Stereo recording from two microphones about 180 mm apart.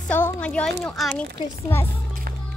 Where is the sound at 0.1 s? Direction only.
10° left (ahead or behind).